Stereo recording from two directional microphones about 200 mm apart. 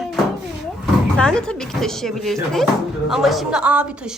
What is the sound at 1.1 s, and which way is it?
Speech, 5° left (ahead or behind).